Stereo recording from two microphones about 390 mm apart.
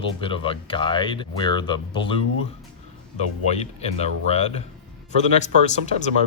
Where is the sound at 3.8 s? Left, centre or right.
Centre.